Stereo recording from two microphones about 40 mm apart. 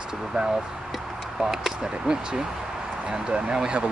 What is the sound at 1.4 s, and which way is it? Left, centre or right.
Speech, centre.